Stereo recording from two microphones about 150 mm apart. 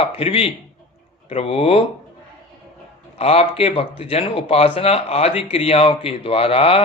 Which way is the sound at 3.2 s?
40° left (ahead or behind).